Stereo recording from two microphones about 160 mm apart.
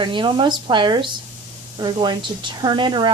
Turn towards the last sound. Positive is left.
turn(degrees=-30)  # may be behind; listen again after turning